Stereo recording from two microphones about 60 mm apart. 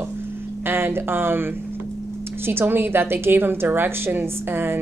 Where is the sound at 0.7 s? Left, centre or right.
Right.